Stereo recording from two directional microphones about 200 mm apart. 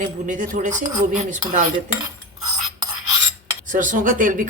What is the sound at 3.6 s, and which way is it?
Speech, 40° right (ahead or behind).